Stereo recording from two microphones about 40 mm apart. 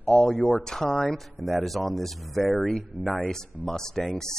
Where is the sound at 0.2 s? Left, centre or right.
Left.